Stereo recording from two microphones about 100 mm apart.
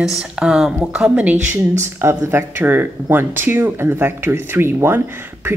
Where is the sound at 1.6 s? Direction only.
25° right (ahead or behind).